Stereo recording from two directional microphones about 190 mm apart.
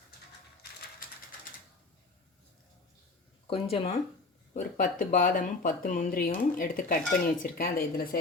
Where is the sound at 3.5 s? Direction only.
30° left (ahead or behind).